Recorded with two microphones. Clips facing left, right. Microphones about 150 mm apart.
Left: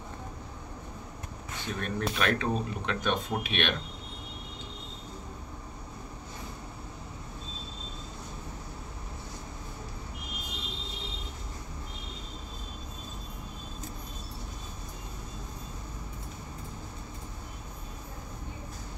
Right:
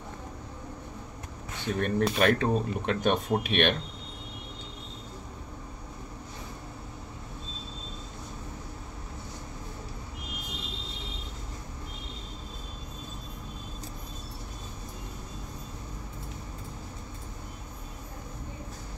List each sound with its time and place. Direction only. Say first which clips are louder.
1.8 s speech: right 6 dB; 55° right (ahead or behind)